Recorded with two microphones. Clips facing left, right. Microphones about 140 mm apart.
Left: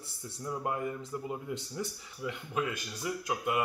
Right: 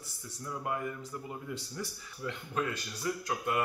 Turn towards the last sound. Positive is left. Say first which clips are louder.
# left 1 dB
turn(degrees=15)  # may be behind; listen again after turning